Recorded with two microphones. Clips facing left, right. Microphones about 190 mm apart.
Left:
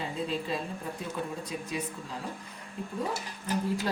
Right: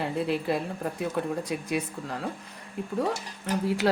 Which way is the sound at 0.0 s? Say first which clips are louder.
Right 5 dB; 70° right (ahead or behind).